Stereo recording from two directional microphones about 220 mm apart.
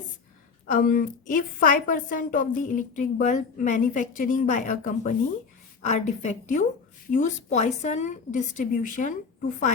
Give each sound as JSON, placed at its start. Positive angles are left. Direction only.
{"t": 0.7, "sound": "a woman's voice", "side_deg": 40}